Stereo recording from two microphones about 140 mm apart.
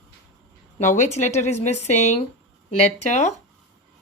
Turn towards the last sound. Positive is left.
turn(degrees=55)  # may be behind; listen again after turning